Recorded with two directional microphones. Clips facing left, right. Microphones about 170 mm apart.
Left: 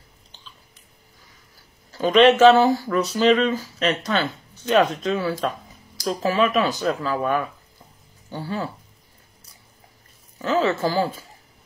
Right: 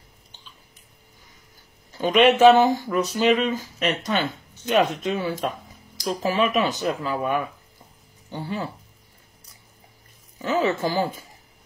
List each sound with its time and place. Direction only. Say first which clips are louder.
1.9 s speech: left 3 dB; 10° right (ahead or behind)
6.3 s speech: left 2 dB; 15° right (ahead or behind)
10.4 s speech: left 2 dB; 15° right (ahead or behind)